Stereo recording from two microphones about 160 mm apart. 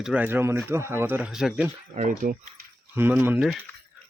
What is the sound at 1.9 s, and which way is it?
Speech, 50° right (ahead or behind).